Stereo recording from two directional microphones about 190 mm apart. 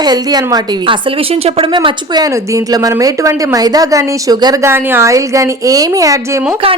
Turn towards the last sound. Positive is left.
turn(degrees=-15)  # may be behind; listen again after turning